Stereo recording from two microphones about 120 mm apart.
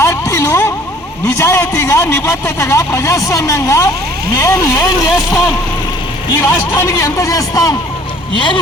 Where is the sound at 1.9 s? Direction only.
25° left (ahead or behind).